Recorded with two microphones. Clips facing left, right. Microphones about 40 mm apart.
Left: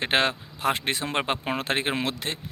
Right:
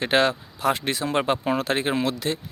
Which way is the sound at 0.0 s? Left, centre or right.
Left.